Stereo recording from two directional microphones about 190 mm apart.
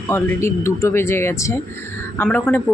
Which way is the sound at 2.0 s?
10° left (ahead or behind).